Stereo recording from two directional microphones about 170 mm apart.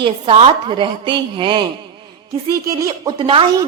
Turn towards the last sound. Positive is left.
turn(degrees=-30)  # may be behind; listen again after turning